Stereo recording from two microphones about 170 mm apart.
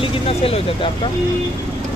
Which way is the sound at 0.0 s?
35° left (ahead or behind).